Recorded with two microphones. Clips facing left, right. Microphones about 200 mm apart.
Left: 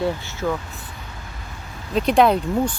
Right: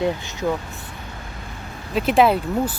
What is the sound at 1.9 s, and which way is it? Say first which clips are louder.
Speech: even; 5° right (ahead or behind).